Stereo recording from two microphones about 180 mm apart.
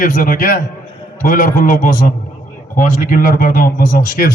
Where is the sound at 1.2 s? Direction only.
50° left (ahead or behind).